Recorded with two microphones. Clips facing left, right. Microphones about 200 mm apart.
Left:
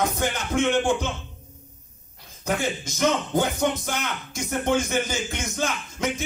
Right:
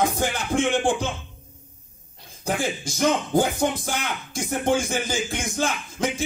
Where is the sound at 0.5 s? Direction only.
30° right (ahead or behind).